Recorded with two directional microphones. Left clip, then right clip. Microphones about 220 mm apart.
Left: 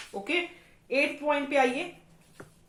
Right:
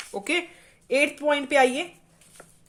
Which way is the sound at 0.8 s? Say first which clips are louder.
Right 4 dB; 50° right (ahead or behind).